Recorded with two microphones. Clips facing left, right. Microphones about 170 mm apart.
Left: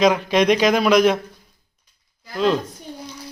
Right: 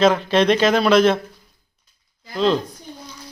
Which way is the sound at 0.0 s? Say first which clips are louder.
Right 1 dB; 10° left (ahead or behind).